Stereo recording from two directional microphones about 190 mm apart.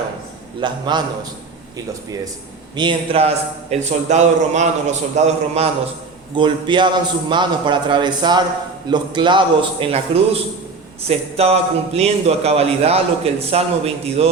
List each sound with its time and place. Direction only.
0.6 s a man's voice: 20° right (ahead or behind)
2.7 s a man's voice: 25° right (ahead or behind)
6.3 s a man's voice: 25° right (ahead or behind)